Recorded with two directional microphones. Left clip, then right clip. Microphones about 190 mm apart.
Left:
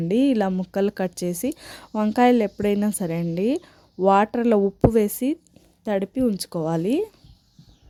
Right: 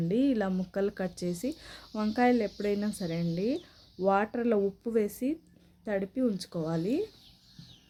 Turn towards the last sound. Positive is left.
turn(degrees=50)  # may be behind; listen again after turning